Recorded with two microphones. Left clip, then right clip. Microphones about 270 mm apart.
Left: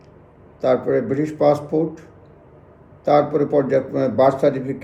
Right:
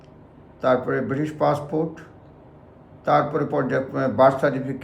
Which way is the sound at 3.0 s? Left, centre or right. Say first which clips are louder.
Left 4 dB; centre.